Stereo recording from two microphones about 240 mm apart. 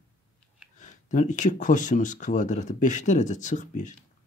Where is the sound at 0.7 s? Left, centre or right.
Left.